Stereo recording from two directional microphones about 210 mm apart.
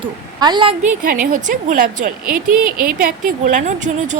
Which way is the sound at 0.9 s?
40° right (ahead or behind).